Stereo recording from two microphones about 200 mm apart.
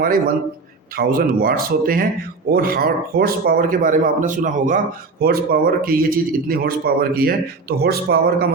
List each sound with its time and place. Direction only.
0.9 s a man's voice: 45° right (ahead or behind)